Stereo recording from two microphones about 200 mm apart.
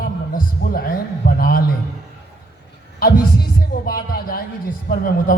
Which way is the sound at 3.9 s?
50° left (ahead or behind).